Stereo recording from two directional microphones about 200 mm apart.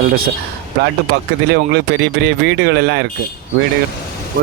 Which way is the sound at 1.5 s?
55° right (ahead or behind).